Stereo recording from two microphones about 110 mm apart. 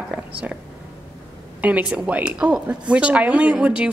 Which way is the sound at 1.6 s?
15° right (ahead or behind).